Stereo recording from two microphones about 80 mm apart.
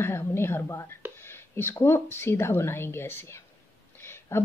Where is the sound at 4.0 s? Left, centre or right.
Left.